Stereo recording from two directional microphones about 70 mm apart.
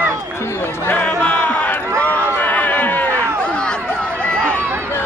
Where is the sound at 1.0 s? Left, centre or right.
Centre.